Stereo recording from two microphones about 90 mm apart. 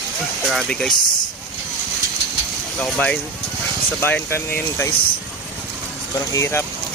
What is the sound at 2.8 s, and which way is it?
Speech, 15° left (ahead or behind).